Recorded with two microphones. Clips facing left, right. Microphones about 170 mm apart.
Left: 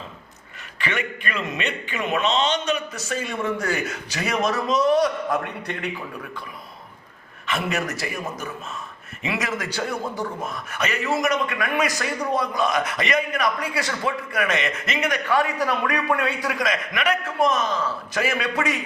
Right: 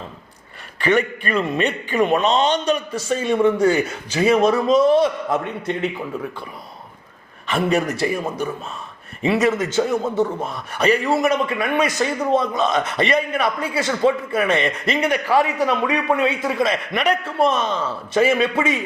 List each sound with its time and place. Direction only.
0.8 s a man's voice: 35° right (ahead or behind)
7.4 s a man's voice: 30° right (ahead or behind)